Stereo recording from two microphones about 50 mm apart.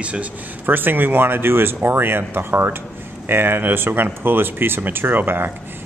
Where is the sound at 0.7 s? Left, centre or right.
Right.